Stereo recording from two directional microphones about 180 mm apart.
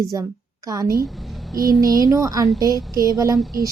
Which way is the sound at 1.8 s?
20° right (ahead or behind).